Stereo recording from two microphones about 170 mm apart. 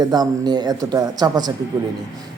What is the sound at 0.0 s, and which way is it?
A man's voice, 25° right (ahead or behind).